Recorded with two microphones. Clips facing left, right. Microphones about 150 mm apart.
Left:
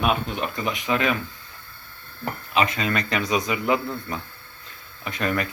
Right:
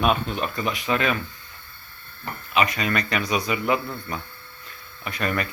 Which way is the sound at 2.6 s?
25° left (ahead or behind).